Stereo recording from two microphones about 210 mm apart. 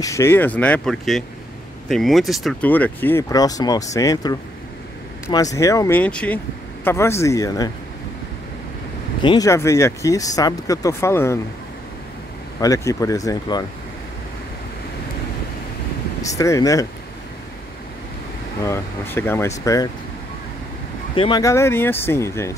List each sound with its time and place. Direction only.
0.0 s speech: 15° left (ahead or behind)
9.2 s speech: 20° left (ahead or behind)
12.5 s speech: 15° left (ahead or behind)
16.3 s speech: 15° left (ahead or behind)
18.6 s speech: 10° left (ahead or behind)
21.1 s speech: 25° left (ahead or behind)